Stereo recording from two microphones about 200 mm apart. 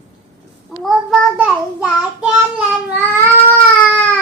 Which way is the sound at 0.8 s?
5° right (ahead or behind).